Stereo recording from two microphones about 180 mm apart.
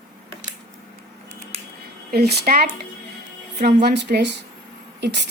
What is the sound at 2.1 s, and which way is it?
A woman's voice, 60° right (ahead or behind).